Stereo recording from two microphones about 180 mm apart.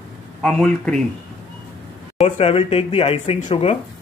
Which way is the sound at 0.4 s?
5° left (ahead or behind).